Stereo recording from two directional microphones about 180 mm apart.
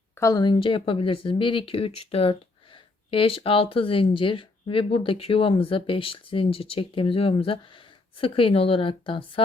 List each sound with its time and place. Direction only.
0.2 s speech: 20° left (ahead or behind)